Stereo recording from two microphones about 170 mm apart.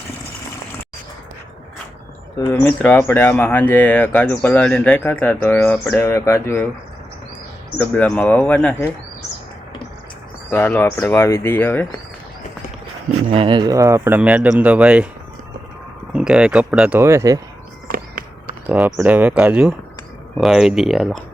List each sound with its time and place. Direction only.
2.5 s speech: 10° left (ahead or behind)
7.8 s speech: 5° left (ahead or behind)
10.5 s speech: 10° left (ahead or behind)
13.3 s speech: 30° right (ahead or behind); by 15.0 s 5° right (ahead or behind)
16.1 s speech: 5° right (ahead or behind)
17.0 s speech: 15° right (ahead or behind)
17.8 s a sound: 60° right (ahead or behind)
18.9 s speech: 15° right (ahead or behind)